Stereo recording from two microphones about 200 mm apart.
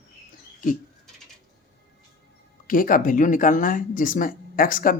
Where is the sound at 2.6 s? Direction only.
45° left (ahead or behind).